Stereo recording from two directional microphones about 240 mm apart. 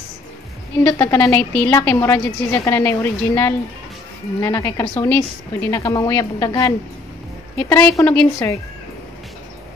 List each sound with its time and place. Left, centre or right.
0.8 s a woman's voice: centre